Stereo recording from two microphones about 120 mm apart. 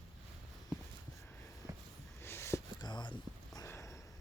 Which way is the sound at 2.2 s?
20° left (ahead or behind).